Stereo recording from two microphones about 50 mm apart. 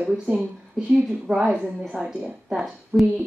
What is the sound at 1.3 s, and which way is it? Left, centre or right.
Speech, centre.